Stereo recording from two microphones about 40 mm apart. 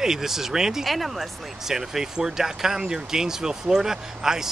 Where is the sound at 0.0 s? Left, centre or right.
Centre.